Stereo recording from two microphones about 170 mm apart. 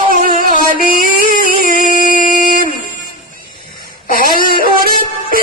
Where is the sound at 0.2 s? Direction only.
55° right (ahead or behind).